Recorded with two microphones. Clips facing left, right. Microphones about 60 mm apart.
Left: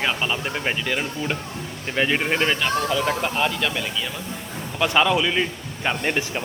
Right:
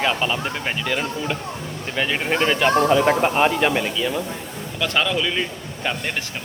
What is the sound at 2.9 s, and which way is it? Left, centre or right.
Speech, right.